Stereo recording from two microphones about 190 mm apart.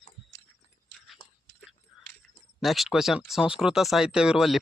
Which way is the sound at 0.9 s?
Centre (ahead or behind).